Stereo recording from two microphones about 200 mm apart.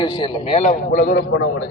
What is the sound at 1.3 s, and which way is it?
Speech, 65° left (ahead or behind).